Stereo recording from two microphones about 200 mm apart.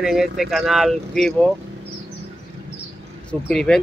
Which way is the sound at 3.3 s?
5° left (ahead or behind).